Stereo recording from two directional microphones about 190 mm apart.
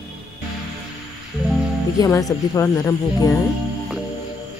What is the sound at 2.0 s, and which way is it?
Speech, 15° left (ahead or behind).